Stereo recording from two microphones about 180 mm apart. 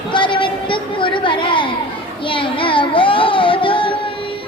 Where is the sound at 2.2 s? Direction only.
30° left (ahead or behind).